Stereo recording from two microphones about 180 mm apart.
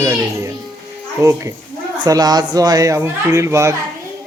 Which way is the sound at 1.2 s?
15° right (ahead or behind).